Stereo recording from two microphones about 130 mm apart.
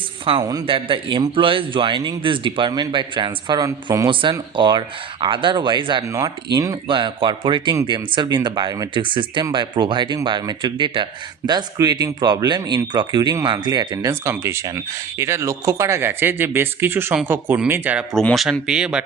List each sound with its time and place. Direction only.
0.3 s a man's voice: 45° right (ahead or behind); by 4.1 s 25° right (ahead or behind)
4.1 s a man's voice: 40° right (ahead or behind)
6.1 s speech: 25° right (ahead or behind)
6.8 s a man's voice: 40° right (ahead or behind); by 18.0 s 15° right (ahead or behind)
18.1 s speech: 5° left (ahead or behind)
18.6 s speech: 5° right (ahead or behind)